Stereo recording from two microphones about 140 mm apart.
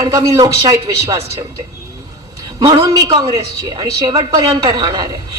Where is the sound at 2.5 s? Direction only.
25° right (ahead or behind).